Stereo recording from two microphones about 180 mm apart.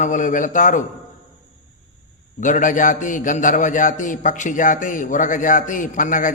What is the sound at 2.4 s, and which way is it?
A man's voice, 45° left (ahead or behind).